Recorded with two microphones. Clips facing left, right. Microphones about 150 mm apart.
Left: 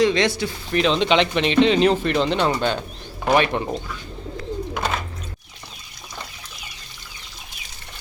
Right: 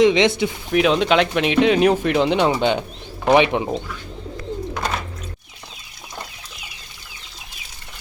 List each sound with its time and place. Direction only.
0.0 s speech: 20° right (ahead or behind)
0.7 s speech: 10° right (ahead or behind)
4.7 s bird: centre (ahead or behind)